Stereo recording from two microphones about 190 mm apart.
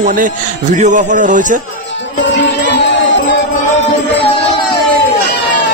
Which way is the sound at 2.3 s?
70° left (ahead or behind).